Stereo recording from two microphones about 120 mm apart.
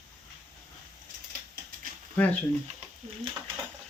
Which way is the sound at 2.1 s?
15° left (ahead or behind).